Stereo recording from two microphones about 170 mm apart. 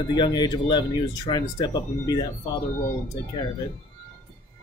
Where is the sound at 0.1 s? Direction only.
25° left (ahead or behind).